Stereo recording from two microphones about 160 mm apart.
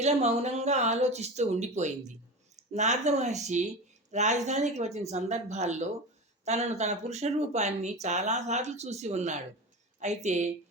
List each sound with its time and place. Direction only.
0.0 s speech: 45° right (ahead or behind)